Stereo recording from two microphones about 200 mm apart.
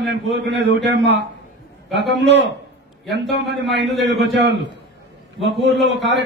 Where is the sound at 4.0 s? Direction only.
60° right (ahead or behind).